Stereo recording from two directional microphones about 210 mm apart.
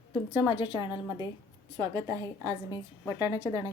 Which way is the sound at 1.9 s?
15° right (ahead or behind).